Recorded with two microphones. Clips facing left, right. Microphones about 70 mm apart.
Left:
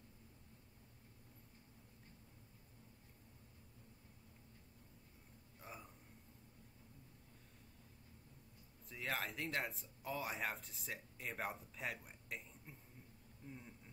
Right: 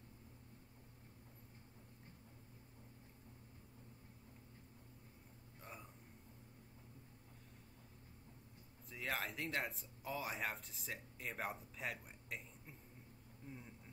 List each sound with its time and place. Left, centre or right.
5.6 s hiccup: centre
8.8 s speech: centre
13.5 s a sound: centre